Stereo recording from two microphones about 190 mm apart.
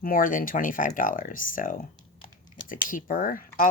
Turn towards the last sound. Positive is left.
turn(degrees=45)  # may be behind; listen again after turning